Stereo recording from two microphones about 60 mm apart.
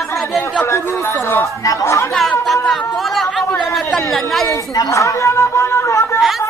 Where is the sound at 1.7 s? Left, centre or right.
Left.